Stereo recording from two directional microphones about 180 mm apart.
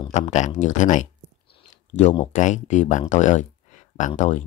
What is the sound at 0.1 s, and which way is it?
Speech, 40° left (ahead or behind).